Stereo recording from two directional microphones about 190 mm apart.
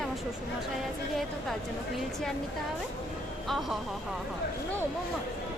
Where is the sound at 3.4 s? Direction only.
Centre (ahead or behind).